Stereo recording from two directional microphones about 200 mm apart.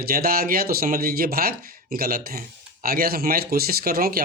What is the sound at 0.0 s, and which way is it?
Speech, 50° right (ahead or behind).